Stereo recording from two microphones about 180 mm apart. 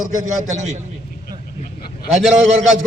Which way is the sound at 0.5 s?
40° right (ahead or behind).